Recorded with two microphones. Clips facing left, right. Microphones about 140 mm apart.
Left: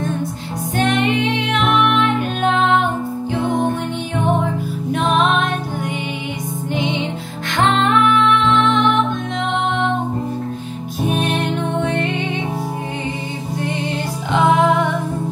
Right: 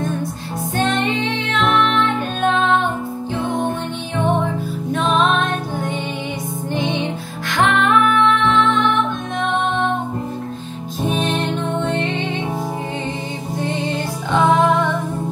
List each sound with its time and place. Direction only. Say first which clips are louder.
0.8 s music: left 4 dB; 15° left (ahead or behind)
5.0 s music: even; 15° left (ahead or behind)
7.5 s music: left 1 dB; 20° left (ahead or behind)
11.1 s music: left 1 dB; 10° left (ahead or behind)